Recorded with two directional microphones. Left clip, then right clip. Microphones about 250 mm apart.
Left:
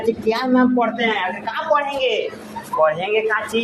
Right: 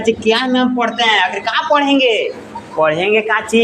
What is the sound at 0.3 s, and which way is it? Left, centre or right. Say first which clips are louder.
A man's voice: right 2 dB; right.